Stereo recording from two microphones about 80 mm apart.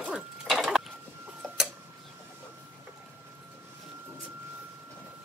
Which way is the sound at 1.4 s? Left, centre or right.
Centre.